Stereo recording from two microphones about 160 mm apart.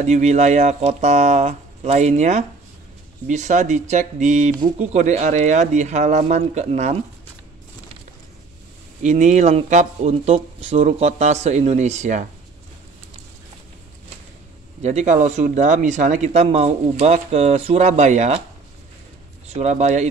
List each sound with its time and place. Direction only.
0.0 s speech: 45° right (ahead or behind)
9.0 s speech: 50° right (ahead or behind)
14.8 s speech: 45° right (ahead or behind)
19.4 s speech: 45° right (ahead or behind)